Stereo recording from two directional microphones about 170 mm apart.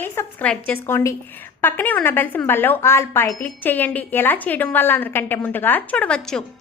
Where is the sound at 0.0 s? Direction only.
10° left (ahead or behind).